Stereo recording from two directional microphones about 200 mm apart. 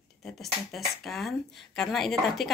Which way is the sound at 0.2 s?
Centre (ahead or behind).